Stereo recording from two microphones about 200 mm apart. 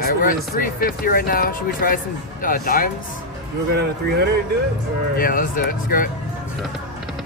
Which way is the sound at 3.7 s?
55° right (ahead or behind).